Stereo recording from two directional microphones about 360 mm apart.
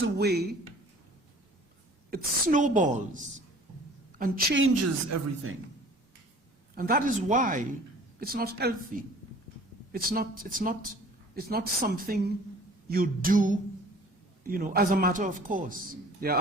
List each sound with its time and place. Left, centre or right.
0.0 s a sound: right
2.0 s a man's voice: right
4.2 s a woman's voice: right
6.7 s a man's voice: right